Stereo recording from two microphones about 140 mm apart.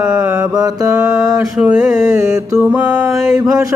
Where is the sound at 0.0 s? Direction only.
5° right (ahead or behind).